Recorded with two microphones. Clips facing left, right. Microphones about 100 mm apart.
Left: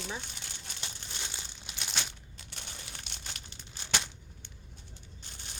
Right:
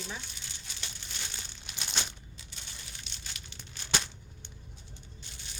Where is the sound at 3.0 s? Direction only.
55° left (ahead or behind).